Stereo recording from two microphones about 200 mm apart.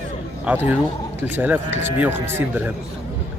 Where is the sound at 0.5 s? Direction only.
5° right (ahead or behind).